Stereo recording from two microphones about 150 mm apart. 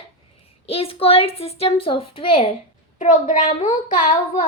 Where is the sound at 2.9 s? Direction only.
55° left (ahead or behind).